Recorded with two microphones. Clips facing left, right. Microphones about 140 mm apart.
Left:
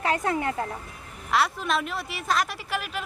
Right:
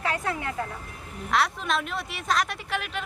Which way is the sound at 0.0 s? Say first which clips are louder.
Left 4 dB; 40° left (ahead or behind).